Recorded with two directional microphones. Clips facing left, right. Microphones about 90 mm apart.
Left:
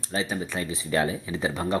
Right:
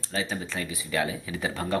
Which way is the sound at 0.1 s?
25° left (ahead or behind).